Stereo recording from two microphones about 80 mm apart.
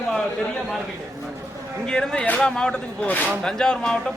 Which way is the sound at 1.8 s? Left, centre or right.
Centre.